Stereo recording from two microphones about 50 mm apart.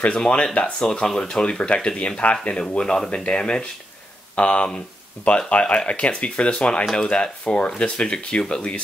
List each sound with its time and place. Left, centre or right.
0.0 s speech: left
2.7 s speech: centre